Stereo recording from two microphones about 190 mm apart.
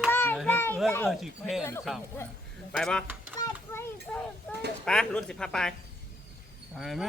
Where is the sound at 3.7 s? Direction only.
10° left (ahead or behind).